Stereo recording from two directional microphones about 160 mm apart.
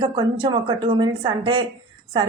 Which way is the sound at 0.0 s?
25° right (ahead or behind).